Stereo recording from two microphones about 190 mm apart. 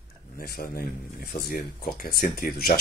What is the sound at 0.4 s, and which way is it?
Speech, 55° left (ahead or behind).